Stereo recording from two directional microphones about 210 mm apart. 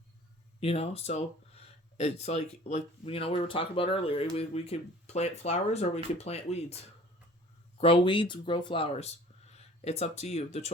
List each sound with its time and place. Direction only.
0.6 s speech: 25° left (ahead or behind)